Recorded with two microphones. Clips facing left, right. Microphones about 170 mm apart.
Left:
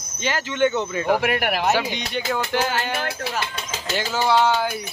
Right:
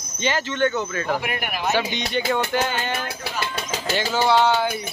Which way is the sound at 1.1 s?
70° left (ahead or behind).